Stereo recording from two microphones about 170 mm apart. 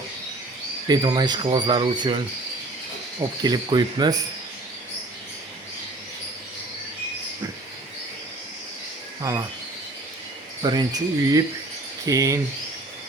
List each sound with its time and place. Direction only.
0.9 s speech: 25° right (ahead or behind)
3.4 s speech: 25° right (ahead or behind)
9.2 s speech: 20° right (ahead or behind)
10.6 s speech: 25° right (ahead or behind)